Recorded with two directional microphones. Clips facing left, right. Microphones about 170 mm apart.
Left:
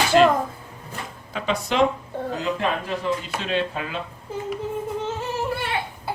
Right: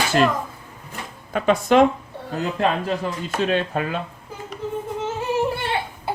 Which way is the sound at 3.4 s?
50° right (ahead or behind).